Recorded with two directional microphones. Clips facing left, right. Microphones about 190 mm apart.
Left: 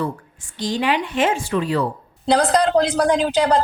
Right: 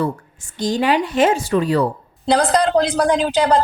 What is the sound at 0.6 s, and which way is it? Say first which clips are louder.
Speech: right 3 dB; 40° right (ahead or behind).